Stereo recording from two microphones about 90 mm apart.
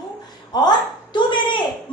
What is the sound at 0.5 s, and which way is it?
A woman's voice, 50° left (ahead or behind).